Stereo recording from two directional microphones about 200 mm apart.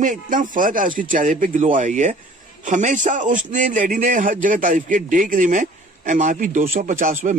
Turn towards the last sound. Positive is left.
turn(degrees=-40)  # may be behind; listen again after turning